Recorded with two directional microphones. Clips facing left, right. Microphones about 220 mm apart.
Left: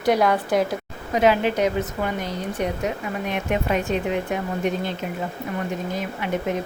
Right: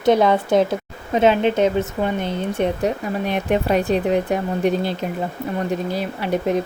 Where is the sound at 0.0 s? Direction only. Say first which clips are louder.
Right 4 dB; 25° right (ahead or behind).